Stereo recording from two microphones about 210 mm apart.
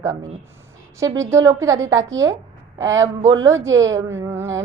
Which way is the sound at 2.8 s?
15° right (ahead or behind).